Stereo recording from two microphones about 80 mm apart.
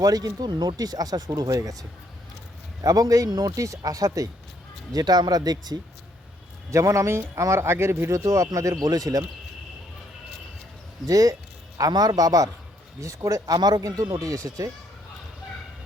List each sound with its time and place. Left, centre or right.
0.0 s speech: right
2.8 s speech: right
6.7 s speech: right
11.0 s speech: right